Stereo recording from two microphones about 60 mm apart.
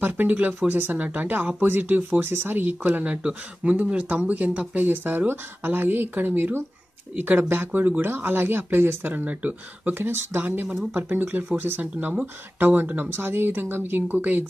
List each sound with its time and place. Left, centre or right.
0.0 s speech: right
11.8 s speech: right
13.1 s speech: right